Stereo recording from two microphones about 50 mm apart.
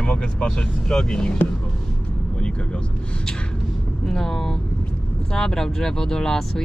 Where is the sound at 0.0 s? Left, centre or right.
Centre.